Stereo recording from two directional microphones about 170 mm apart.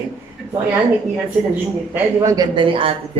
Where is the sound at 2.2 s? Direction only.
20° right (ahead or behind).